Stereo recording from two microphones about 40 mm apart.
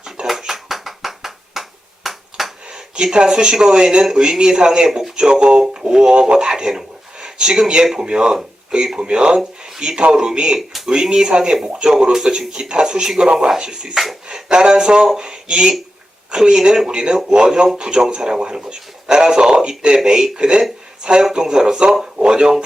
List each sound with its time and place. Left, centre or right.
0.3 s a sound: centre
2.0 s finger snapping: centre
2.7 s speech: right
6.3 s a sound: centre
7.9 s speech: centre
10.7 s a sound: centre
10.9 s speech: centre
12.5 s speech: right
13.9 s speech: centre
14.3 s speech: centre